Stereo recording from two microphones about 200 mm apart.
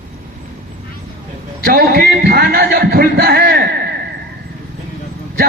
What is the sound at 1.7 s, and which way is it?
A man's voice, 50° right (ahead or behind).